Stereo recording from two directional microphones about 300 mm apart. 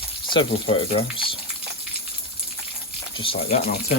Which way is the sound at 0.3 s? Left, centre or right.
Centre.